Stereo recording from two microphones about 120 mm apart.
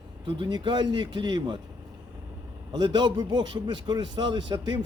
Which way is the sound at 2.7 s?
40° right (ahead or behind).